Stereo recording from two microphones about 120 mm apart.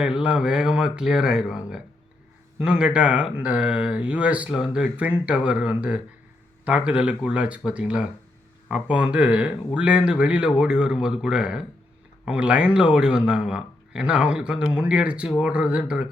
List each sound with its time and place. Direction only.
0.0 s speech: 10° right (ahead or behind)